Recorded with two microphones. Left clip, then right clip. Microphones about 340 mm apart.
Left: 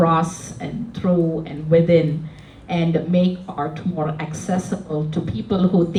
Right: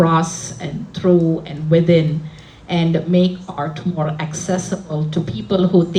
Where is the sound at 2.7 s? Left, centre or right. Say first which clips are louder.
Right 2 dB; right.